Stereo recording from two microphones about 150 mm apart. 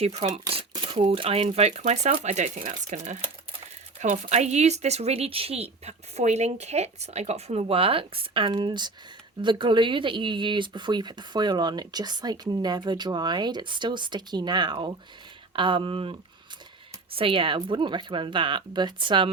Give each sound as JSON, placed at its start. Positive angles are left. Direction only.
{"t": 0.0, "sound": "speech", "side_deg": -45}
{"t": 0.7, "sound": "speech", "side_deg": -30}
{"t": 17.2, "sound": "speech", "side_deg": -35}